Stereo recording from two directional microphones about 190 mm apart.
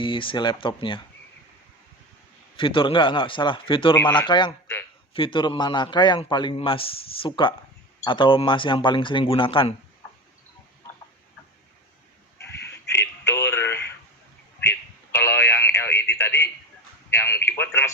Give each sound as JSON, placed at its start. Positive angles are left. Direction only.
{"t": 0.0, "sound": "a man's voice", "side_deg": 25}
{"t": 2.6, "sound": "a man's voice", "side_deg": 25}
{"t": 12.6, "sound": "a sound", "side_deg": 15}